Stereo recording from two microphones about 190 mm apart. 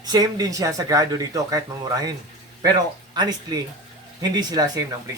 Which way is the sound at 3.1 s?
20° right (ahead or behind).